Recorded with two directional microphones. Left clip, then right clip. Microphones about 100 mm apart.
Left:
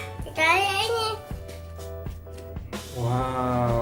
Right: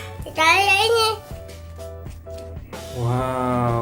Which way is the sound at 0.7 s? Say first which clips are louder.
Right 8 dB; 60° right (ahead or behind).